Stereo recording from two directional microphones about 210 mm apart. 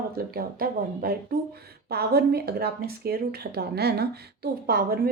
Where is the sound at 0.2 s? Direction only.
45° right (ahead or behind).